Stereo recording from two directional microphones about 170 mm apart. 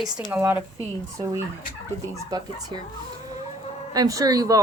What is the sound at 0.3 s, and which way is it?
Speech, 15° right (ahead or behind).